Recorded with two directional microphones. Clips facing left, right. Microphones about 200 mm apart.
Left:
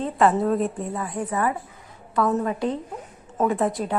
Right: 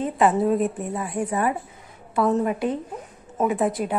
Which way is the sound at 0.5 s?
5° right (ahead or behind).